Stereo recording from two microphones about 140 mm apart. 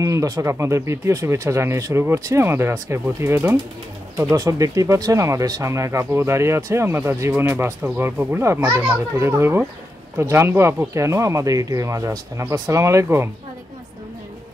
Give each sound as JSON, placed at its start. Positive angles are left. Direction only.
{"t": 0.0, "sound": "a child's voice", "side_deg": -25}